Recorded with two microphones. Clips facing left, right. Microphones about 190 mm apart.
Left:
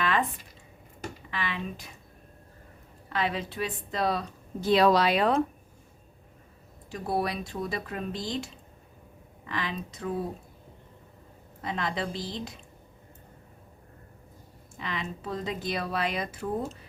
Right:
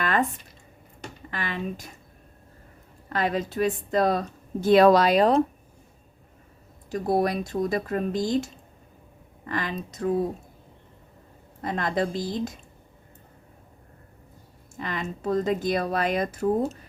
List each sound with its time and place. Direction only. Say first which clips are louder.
0.0 s squish: right 3 dB; 45° right (ahead or behind)
1.3 s speech: right 4 dB; 45° right (ahead or behind)
3.1 s a woman's voice: right 4 dB; 45° right (ahead or behind)
6.9 s a woman's voice: right 6 dB; 45° right (ahead or behind)
11.6 s a woman's voice: right 5 dB; 45° right (ahead or behind)
14.8 s a woman's voice: right 4 dB; 45° right (ahead or behind)